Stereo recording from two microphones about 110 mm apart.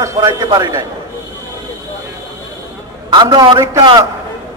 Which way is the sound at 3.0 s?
40° right (ahead or behind).